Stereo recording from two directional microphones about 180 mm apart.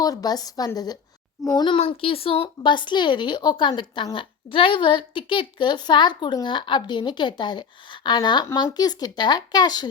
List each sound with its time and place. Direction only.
0.0 s speech: 20° left (ahead or behind)